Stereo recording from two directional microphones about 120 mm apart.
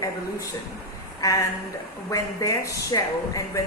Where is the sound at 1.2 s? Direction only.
30° left (ahead or behind).